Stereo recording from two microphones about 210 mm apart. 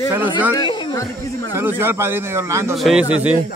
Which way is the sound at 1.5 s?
10° right (ahead or behind).